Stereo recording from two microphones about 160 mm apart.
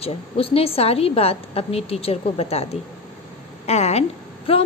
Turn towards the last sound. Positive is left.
turn(degrees=35)  # may be behind; listen again after turning